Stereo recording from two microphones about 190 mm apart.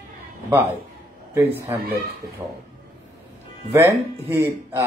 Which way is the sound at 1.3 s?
10° right (ahead or behind).